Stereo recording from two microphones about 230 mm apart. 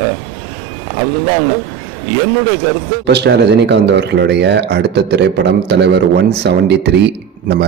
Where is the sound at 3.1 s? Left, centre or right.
Right.